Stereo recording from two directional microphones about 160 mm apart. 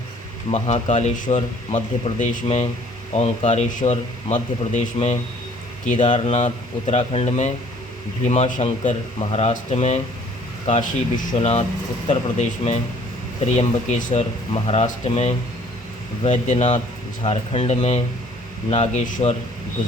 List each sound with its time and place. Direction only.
0.5 s speech: 45° left (ahead or behind)